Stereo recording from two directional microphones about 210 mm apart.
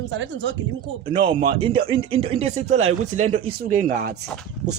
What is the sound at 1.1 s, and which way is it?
Speech, 25° right (ahead or behind).